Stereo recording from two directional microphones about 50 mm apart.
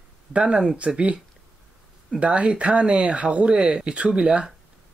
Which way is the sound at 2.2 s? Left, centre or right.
Right.